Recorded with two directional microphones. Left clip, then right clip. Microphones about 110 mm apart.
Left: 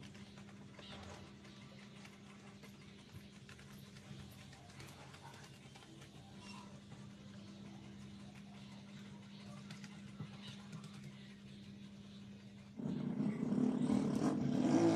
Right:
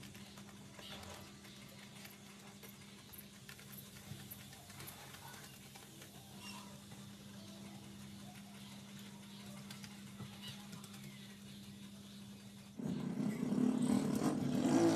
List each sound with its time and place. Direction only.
12.8 s dog: 5° left (ahead or behind)
13.2 s vehicle: 15° left (ahead or behind)